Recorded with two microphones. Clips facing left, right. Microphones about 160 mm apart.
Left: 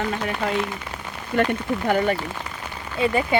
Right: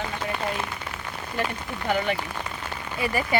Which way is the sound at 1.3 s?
80° left.